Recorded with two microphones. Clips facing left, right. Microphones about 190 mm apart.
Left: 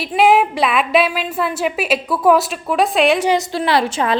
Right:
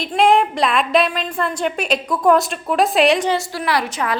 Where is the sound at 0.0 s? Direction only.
5° left (ahead or behind).